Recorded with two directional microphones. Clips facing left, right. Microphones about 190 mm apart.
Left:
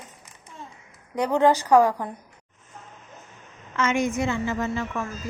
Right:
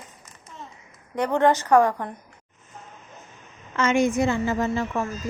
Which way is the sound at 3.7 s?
35° right (ahead or behind).